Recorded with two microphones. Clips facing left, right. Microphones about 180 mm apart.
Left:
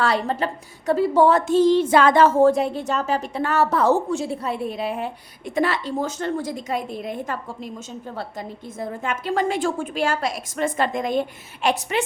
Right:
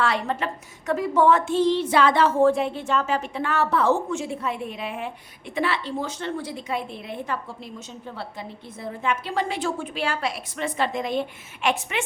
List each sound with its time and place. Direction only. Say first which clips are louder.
0.0 s a woman's voice: left 3 dB; 35° left (ahead or behind)